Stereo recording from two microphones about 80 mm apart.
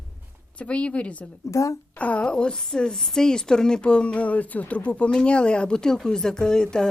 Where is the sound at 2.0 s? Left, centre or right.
Centre.